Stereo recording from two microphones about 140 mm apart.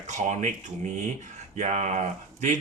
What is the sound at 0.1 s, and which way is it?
Speech, 60° right (ahead or behind).